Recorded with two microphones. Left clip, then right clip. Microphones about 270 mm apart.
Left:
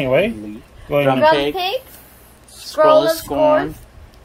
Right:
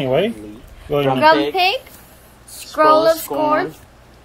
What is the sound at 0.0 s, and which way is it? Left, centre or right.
Speech, centre.